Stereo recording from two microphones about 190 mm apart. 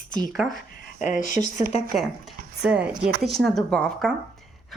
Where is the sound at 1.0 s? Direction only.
40° left (ahead or behind).